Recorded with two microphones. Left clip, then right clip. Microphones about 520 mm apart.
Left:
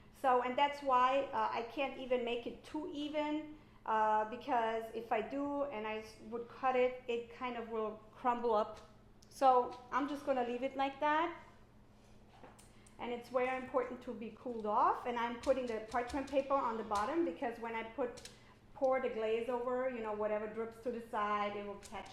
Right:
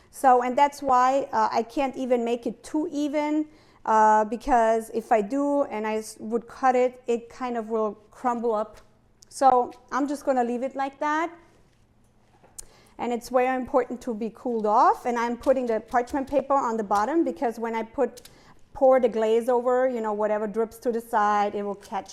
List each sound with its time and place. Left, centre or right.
0.2 s a woman's voice: right
12.5 s speech: right